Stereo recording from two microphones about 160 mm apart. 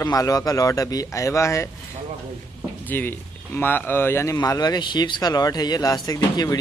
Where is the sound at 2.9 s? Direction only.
15° left (ahead or behind).